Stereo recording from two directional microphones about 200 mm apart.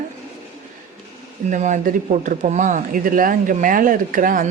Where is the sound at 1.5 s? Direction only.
40° right (ahead or behind).